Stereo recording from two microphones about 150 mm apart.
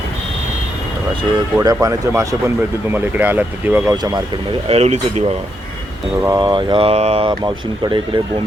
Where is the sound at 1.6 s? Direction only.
25° right (ahead or behind).